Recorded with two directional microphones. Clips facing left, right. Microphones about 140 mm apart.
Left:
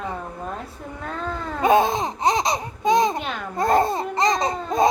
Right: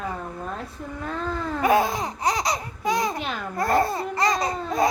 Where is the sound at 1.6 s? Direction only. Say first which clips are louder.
Left 3 dB; 20° left (ahead or behind).